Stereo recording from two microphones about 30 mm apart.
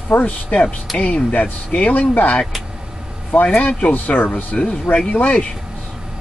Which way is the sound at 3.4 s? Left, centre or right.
Left.